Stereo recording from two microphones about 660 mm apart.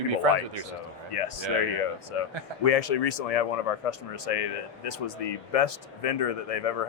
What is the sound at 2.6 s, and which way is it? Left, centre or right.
Speech, left.